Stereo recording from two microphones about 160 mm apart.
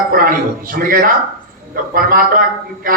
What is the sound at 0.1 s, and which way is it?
Speech, 60° right (ahead or behind).